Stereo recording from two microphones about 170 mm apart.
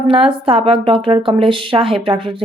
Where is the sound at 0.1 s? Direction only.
35° right (ahead or behind).